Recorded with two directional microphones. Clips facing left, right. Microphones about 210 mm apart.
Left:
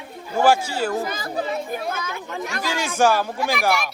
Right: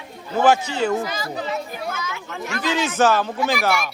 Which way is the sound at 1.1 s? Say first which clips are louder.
Left 1 dB; 55° left (ahead or behind).